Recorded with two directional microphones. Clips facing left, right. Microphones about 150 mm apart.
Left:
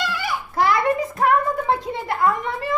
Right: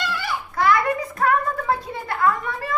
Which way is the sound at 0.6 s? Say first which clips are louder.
Left 1 dB; 25° left (ahead or behind).